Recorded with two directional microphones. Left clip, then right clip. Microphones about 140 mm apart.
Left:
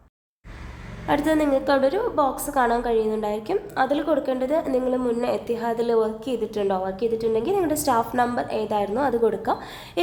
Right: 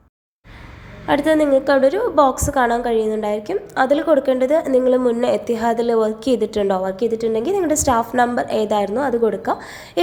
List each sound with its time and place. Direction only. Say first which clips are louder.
1.0 s a woman's voice: right 5 dB; 25° right (ahead or behind)
3.8 s a woman's voice: right 8 dB; 25° right (ahead or behind)
4.9 s a woman's voice: right 7 dB; 30° right (ahead or behind)
6.1 s a woman's voice: right 7 dB; 35° right (ahead or behind); by 10.0 s 20° right (ahead or behind)